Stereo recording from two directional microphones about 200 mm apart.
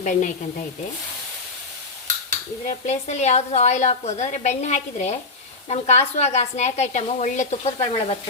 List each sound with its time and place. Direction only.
0.0 s a woman's voice: 40° left (ahead or behind)
2.6 s a woman's voice: 35° left (ahead or behind)